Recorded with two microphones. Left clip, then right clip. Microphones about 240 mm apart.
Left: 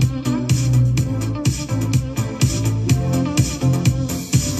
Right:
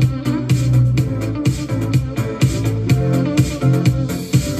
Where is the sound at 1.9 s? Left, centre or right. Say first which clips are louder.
Right 3 dB; left.